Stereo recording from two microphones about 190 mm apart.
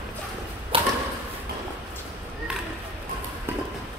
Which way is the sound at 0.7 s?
25° right (ahead or behind).